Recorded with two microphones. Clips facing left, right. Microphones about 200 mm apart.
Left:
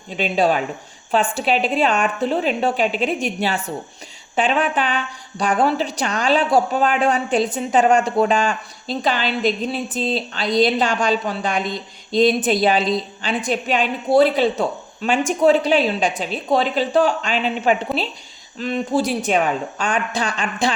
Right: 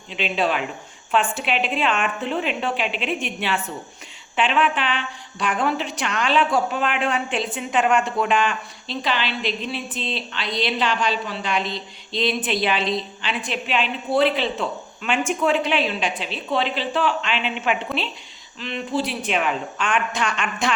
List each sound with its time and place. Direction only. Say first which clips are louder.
0.1 s a woman's voice: left 5 dB; 40° left (ahead or behind)